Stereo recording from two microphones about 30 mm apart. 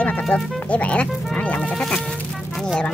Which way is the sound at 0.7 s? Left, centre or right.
Left.